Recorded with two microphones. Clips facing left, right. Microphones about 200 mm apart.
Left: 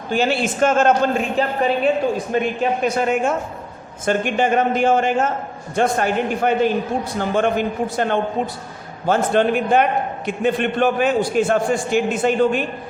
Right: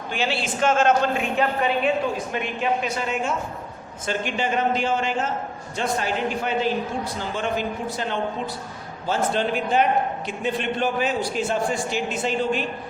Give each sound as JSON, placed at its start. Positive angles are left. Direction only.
{"t": 0.1, "sound": "a man's voice", "side_deg": 45}